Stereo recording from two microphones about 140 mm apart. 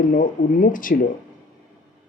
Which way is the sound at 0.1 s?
75° left (ahead or behind).